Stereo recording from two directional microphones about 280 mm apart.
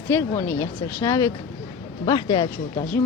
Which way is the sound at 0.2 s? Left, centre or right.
Centre.